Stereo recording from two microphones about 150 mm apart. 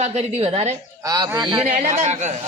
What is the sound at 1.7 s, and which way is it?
Speech, 50° right (ahead or behind).